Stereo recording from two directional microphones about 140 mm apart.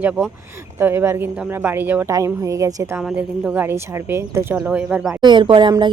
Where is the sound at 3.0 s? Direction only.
5° right (ahead or behind).